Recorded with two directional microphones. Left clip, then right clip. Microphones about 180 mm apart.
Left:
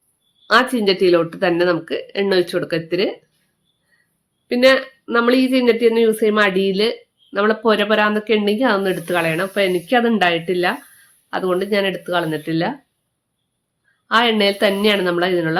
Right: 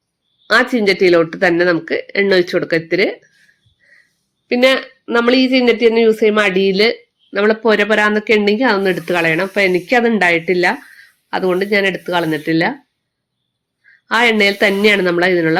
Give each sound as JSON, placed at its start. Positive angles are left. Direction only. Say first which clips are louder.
{"t": 0.4, "sound": "speech", "louder": "right 2 dB", "side_deg": -10}
{"t": 4.4, "sound": "speech", "louder": "right 1 dB", "side_deg": -5}
{"t": 14.1, "sound": "speech", "louder": "right 3 dB", "side_deg": -10}